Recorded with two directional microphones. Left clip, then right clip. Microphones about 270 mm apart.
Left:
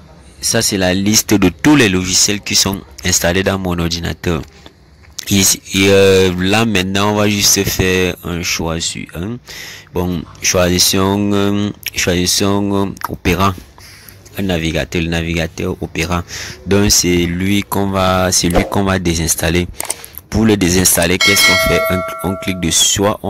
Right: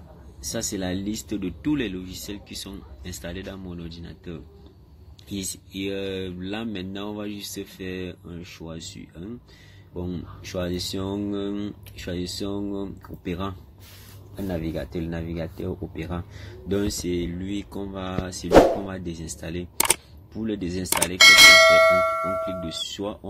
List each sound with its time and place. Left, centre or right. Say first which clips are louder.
0.4 s speech: left 15 dB; left
21.2 s clang: right 2 dB; centre
22.5 s speech: left 16 dB; left